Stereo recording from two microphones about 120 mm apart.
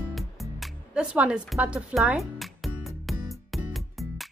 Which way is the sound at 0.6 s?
5° right (ahead or behind).